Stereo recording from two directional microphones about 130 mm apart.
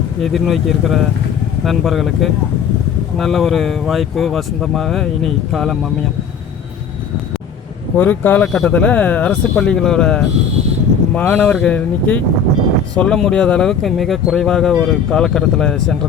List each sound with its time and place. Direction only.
0.2 s speech: centre (ahead or behind)
7.9 s speech: 15° left (ahead or behind)